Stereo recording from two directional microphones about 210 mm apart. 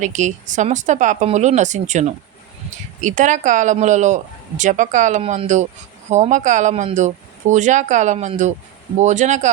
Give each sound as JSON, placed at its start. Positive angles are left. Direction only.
{"t": 0.0, "sound": "speech", "side_deg": -35}